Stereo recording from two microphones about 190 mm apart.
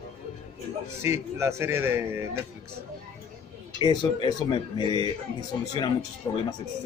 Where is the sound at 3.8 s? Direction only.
25° left (ahead or behind).